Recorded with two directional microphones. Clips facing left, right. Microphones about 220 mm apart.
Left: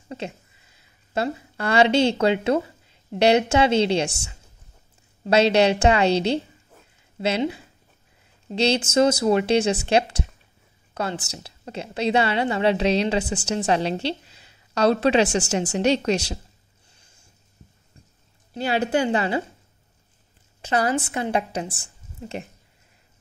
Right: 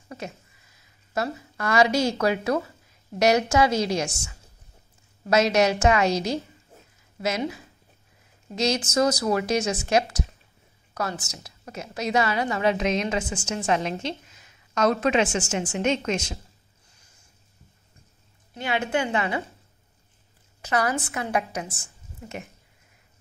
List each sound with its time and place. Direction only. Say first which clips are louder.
0.7 s a woman's voice: left 1 dB; 25° left (ahead or behind)
5.2 s a woman's voice: left 3 dB; 30° left (ahead or behind)
18.5 s a woman's voice: left 4 dB; 35° left (ahead or behind)
20.6 s a woman's voice: left 3 dB; 30° left (ahead or behind)